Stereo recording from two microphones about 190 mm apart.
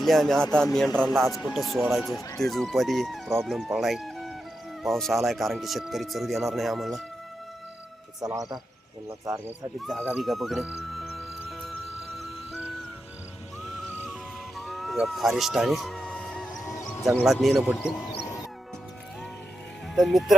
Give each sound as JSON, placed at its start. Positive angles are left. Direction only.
{"t": 0.0, "sound": "speech", "side_deg": 0}
{"t": 1.0, "sound": "speech", "side_deg": -15}
{"t": 1.3, "sound": "speech", "side_deg": 20}
{"t": 1.5, "sound": "speech", "side_deg": 0}
{"t": 8.2, "sound": "speech", "side_deg": -20}
{"t": 10.0, "sound": "speech", "side_deg": -5}
{"t": 12.2, "sound": "music", "side_deg": -5}
{"t": 14.6, "sound": "music", "side_deg": 0}
{"t": 17.2, "sound": "speech", "side_deg": 0}
{"t": 20.0, "sound": "speech", "side_deg": 0}